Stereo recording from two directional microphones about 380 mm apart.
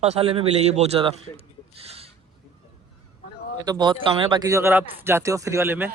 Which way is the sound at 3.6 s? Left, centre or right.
Centre.